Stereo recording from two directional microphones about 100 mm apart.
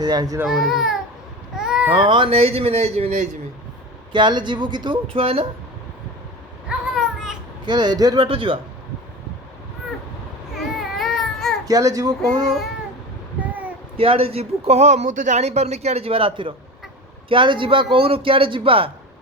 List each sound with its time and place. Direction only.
0.0 s speech: 40° right (ahead or behind)
0.4 s speech: 5° right (ahead or behind)
1.5 s babbling: 5° right (ahead or behind)
2.0 s a man's voice: 60° right (ahead or behind); by 3.1 s 90° right
4.1 s speech: 50° right (ahead or behind); by 5.5 s 65° right (ahead or behind)
6.7 s vehicle: 5° right (ahead or behind)
7.6 s speech: 45° right (ahead or behind)
8.3 s speech: 65° right (ahead or behind)
10.5 s baby cry: centre (ahead or behind)
11.6 s speech: 35° right (ahead or behind)
13.9 s a man's voice: 70° right (ahead or behind)